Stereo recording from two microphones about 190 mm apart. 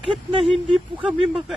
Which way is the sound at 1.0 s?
Centre (ahead or behind).